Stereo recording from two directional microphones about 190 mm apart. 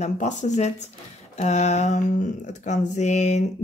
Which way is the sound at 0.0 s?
35° left (ahead or behind).